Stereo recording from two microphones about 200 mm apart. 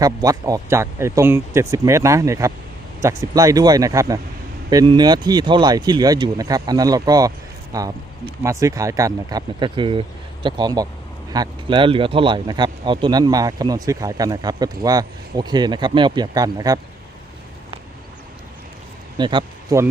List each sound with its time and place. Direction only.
0.0 s speech: 15° right (ahead or behind)
19.1 s speech: 20° right (ahead or behind)